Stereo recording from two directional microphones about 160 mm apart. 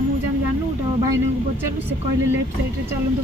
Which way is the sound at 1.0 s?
15° right (ahead or behind).